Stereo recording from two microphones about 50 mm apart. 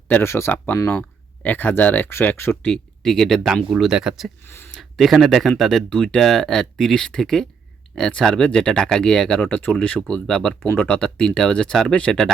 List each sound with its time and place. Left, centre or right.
0.2 s speech: left
0.9 s speech: left
2.0 s speech: left
2.6 s speech: centre
3.4 s speech: centre
4.4 s speech: left
4.8 s speech: centre
9.4 s speech: left
10.2 s speech: centre
10.8 s speech: left
11.0 s speech: centre